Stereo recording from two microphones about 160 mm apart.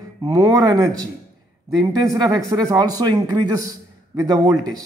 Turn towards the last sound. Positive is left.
turn(degrees=-25)  # may be behind; listen again after turning